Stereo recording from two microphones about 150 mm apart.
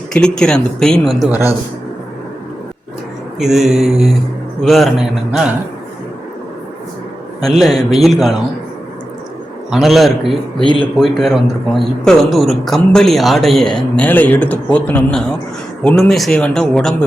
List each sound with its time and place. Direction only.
0.1 s a man's voice: 5° left (ahead or behind)
1.3 s speech: 15° right (ahead or behind)
3.3 s a man's voice: centre (ahead or behind)
7.6 s a man's voice: centre (ahead or behind)
9.7 s a man's voice: centre (ahead or behind)
10.6 s speech: 35° right (ahead or behind)
11.0 s a man's voice: centre (ahead or behind)